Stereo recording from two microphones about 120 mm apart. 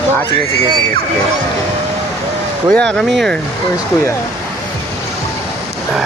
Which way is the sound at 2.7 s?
5° left (ahead or behind).